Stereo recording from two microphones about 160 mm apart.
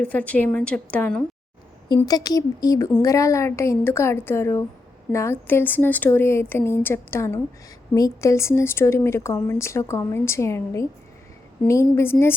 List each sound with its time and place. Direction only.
0.0 s speech: 10° left (ahead or behind)
2.0 s speech: 25° left (ahead or behind)